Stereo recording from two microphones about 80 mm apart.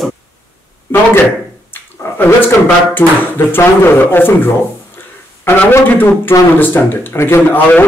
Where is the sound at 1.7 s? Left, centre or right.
Left.